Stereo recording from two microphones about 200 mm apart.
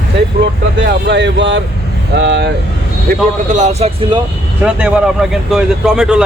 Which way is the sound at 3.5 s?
35° right (ahead or behind).